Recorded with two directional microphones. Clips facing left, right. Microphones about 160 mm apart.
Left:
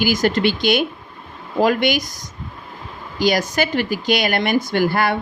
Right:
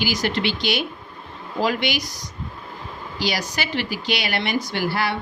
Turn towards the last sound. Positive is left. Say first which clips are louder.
# left 6 dB
turn(degrees=50)  # may be behind; listen again after turning